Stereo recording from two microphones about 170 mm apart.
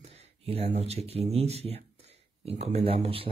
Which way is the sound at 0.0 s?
35° right (ahead or behind).